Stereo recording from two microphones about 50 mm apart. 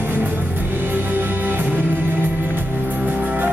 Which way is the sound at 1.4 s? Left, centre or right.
Right.